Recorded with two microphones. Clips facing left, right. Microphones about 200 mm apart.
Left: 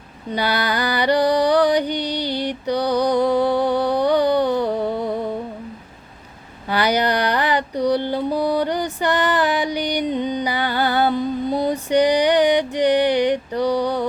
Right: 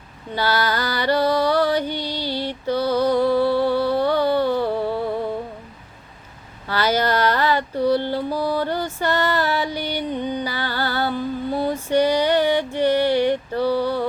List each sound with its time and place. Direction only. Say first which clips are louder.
0.3 s music: even; 15° left (ahead or behind)
6.7 s mantra: left 1 dB; 15° left (ahead or behind)
12.7 s music: left 1 dB; 15° left (ahead or behind)